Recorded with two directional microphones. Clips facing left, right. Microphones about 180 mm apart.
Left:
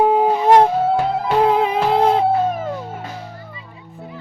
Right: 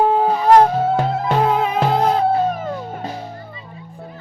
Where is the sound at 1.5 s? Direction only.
30° left (ahead or behind).